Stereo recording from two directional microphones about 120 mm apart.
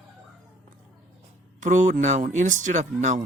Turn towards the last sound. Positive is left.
turn(degrees=-90)